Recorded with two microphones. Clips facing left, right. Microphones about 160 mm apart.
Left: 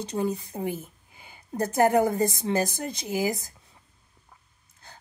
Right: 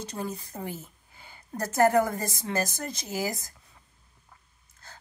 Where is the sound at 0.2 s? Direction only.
15° left (ahead or behind).